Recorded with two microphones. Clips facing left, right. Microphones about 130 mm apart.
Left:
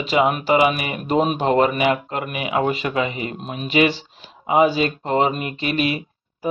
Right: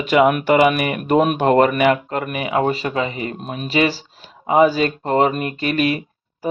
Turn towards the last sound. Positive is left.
turn(degrees=-45)  # may be behind; listen again after turning